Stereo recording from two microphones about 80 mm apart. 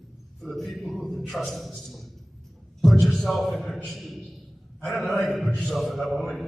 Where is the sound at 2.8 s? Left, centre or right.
Centre.